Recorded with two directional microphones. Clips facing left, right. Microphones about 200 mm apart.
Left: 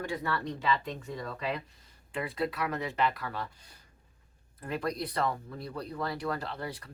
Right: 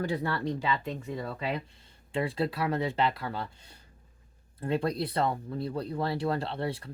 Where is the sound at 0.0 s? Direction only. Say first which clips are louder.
Right 3 dB; 35° right (ahead or behind).